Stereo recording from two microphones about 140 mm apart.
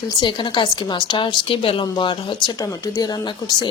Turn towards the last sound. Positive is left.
turn(degrees=30)  # may be behind; listen again after turning